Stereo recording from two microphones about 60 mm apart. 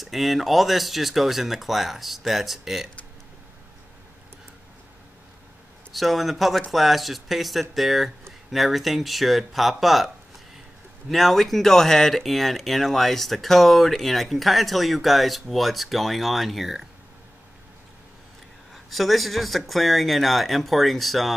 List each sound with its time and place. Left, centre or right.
0.0 s speech: centre
5.9 s speech: centre
18.9 s speech: centre